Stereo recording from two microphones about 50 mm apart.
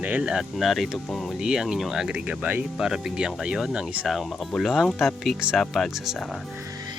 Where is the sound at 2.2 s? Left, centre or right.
Right.